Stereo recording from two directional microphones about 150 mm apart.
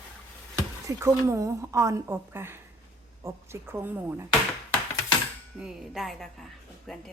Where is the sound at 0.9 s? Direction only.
20° right (ahead or behind).